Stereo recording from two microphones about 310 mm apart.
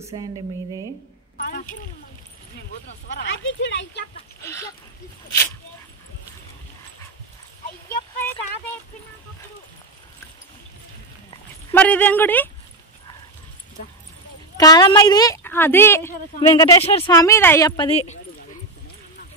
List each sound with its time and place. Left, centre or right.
0.0 s a woman's voice: centre
1.4 s speech: left
3.2 s speech: left
4.4 s a woman's voice: centre
11.2 s speech: centre
14.6 s a woman's voice: centre